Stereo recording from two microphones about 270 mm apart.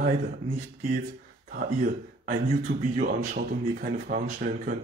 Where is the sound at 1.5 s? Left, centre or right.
Right.